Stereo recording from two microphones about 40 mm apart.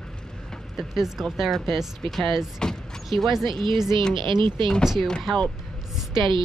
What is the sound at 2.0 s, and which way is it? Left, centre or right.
Speech, centre.